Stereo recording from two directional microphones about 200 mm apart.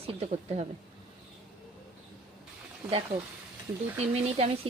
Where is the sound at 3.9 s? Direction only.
30° right (ahead or behind).